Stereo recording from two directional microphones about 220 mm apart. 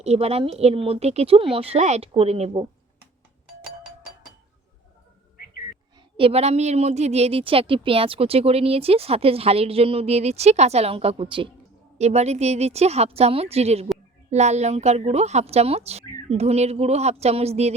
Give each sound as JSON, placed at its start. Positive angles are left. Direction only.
{"t": 0.0, "sound": "a woman's voice", "side_deg": -30}
{"t": 6.1, "sound": "a woman's voice", "side_deg": -25}